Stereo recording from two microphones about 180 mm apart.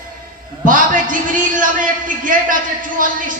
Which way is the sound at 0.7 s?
45° right (ahead or behind).